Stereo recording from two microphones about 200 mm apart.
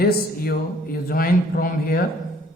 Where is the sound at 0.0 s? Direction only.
50° left (ahead or behind).